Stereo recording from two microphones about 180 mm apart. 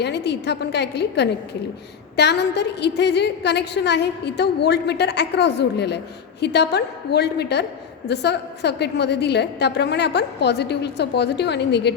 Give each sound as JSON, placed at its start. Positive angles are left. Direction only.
{"t": 0.0, "sound": "a woman's voice", "side_deg": 70}